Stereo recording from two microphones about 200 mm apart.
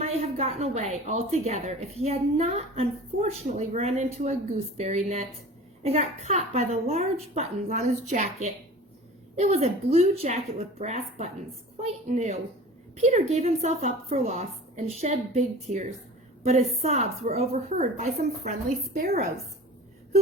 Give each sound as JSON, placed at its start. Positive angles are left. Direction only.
{"t": 0.0, "sound": "a woman's voice", "side_deg": -30}